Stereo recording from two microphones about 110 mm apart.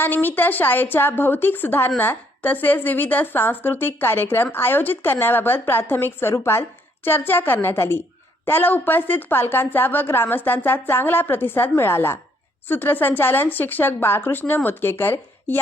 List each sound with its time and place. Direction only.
0.0 s a woman's voice: 15° left (ahead or behind)